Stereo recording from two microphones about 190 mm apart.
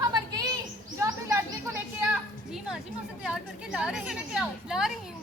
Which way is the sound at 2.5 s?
5° right (ahead or behind).